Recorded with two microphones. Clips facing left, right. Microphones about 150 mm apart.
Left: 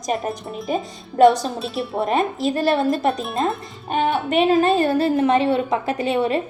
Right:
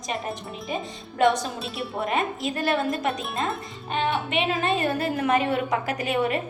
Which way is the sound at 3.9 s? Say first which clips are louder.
Left 6 dB; 45° left (ahead or behind).